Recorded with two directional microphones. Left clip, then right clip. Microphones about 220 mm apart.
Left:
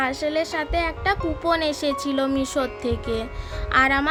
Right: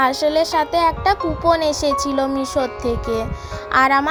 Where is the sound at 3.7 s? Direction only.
5° right (ahead or behind).